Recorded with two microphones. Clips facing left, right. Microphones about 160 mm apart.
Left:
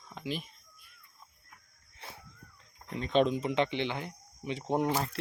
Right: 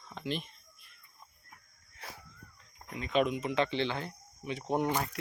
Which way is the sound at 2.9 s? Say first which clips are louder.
Left 3 dB; 30° left (ahead or behind).